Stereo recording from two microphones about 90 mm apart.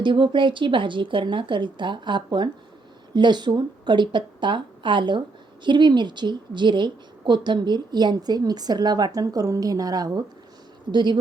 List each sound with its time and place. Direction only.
0.0 s a woman's voice: 65° right (ahead or behind); by 10.2 s 45° right (ahead or behind)
10.9 s speech: 60° right (ahead or behind)